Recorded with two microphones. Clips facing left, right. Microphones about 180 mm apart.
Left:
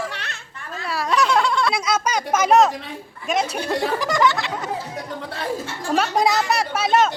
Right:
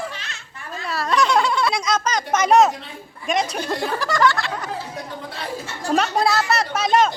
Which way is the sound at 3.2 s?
5° left (ahead or behind).